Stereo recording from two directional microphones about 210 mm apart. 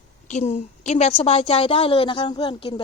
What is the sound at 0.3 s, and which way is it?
A woman's voice, 35° left (ahead or behind).